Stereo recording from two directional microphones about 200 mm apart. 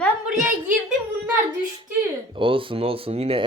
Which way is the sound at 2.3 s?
25° right (ahead or behind).